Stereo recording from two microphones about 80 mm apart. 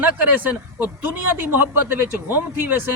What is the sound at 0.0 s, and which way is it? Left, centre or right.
A man's voice, right.